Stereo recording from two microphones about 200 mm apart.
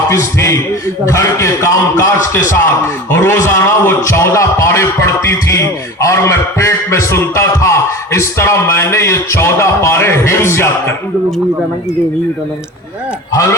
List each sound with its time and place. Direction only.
0.1 s a man's voice: 15° left (ahead or behind)
3.1 s a man's voice: 15° left (ahead or behind)
13.3 s a man's voice: 15° left (ahead or behind)